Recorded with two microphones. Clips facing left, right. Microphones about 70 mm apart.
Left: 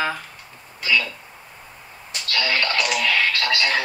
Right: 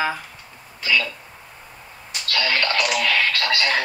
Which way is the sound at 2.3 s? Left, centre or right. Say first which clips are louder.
Right 1 dB; right.